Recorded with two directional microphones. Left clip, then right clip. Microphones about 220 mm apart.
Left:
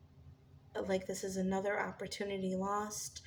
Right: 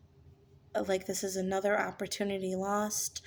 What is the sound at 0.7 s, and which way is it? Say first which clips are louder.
A woman's voice: right 5 dB; 50° right (ahead or behind).